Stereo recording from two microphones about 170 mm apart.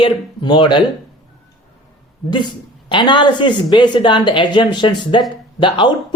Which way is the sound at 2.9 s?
30° left (ahead or behind).